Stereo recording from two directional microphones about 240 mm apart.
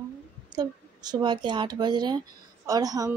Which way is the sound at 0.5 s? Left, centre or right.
Centre.